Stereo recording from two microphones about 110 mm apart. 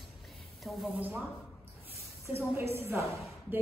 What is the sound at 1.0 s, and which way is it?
Speech, 15° right (ahead or behind).